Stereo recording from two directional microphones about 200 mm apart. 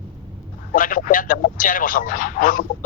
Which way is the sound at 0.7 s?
45° left (ahead or behind).